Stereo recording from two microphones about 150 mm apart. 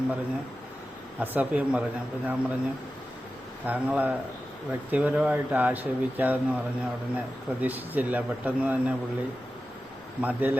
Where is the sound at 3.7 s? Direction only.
10° right (ahead or behind).